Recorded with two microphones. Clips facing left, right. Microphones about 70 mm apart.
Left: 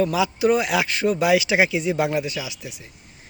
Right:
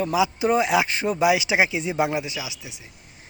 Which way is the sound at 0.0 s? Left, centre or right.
Centre.